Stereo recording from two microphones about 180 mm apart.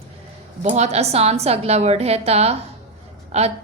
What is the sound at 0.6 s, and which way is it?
A woman's voice, 40° right (ahead or behind).